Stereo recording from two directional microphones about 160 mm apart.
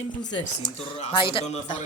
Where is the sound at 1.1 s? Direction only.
30° left (ahead or behind).